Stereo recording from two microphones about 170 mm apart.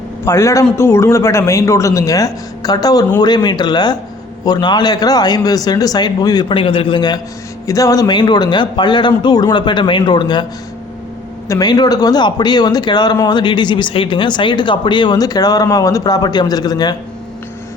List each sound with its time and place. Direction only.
0.3 s a man's voice: 15° left (ahead or behind)
11.4 s speech: 20° left (ahead or behind)